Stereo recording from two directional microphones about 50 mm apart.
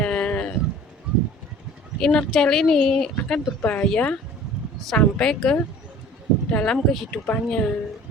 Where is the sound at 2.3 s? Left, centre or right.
Centre.